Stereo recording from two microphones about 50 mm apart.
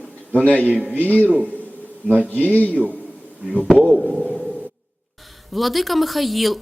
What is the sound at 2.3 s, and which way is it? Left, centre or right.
Speech, left.